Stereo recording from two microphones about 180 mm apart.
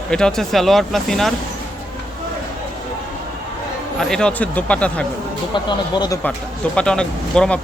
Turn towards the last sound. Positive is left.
turn(degrees=5)  # may be behind; listen again after turning